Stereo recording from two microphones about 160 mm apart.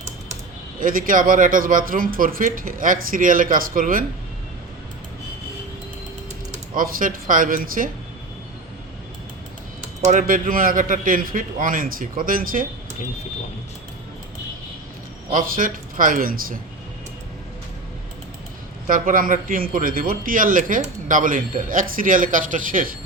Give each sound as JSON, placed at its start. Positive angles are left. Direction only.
{"t": 0.8, "sound": "a man's voice", "side_deg": -60}
{"t": 6.5, "sound": "speech", "side_deg": -60}
{"t": 10.0, "sound": "a man's voice", "side_deg": -55}
{"t": 15.3, "sound": "a man's voice", "side_deg": -60}
{"t": 18.9, "sound": "a man's voice", "side_deg": -55}